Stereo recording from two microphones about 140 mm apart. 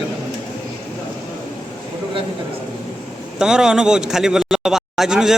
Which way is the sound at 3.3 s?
5° right (ahead or behind).